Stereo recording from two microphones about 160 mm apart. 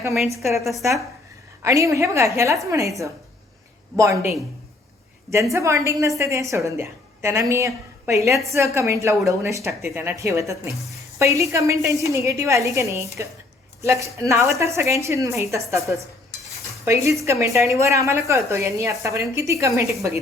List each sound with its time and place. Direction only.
0.6 s speech: centre (ahead or behind)
1.6 s a woman's voice: 20° right (ahead or behind)
5.5 s a woman's voice: 20° right (ahead or behind)
15.7 s speech: centre (ahead or behind)
16.8 s a woman's voice: 20° right (ahead or behind)